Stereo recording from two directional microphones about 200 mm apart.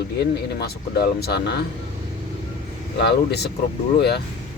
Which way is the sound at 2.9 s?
55° left (ahead or behind).